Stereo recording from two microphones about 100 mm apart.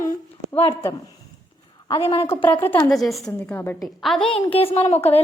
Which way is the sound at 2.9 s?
Centre (ahead or behind).